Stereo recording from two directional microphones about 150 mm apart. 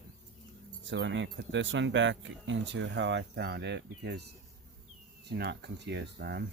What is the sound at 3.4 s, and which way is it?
Speech, 90° right.